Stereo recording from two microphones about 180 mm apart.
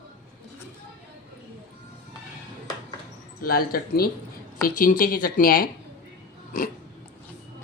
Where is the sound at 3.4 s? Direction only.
55° left (ahead or behind).